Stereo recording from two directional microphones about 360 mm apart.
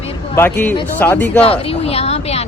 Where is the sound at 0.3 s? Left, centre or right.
Centre.